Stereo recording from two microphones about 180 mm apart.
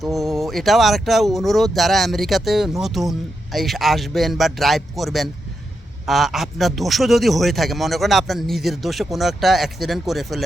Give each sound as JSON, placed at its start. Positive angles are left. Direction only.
{"t": 0.0, "sound": "speech", "side_deg": 0}